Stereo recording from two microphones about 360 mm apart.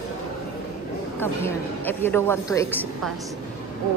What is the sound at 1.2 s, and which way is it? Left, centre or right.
A woman's voice, centre.